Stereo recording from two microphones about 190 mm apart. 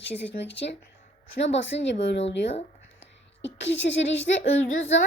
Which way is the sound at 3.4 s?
70° left (ahead or behind).